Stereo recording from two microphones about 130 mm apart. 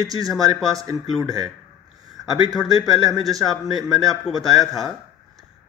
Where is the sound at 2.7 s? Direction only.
30° right (ahead or behind).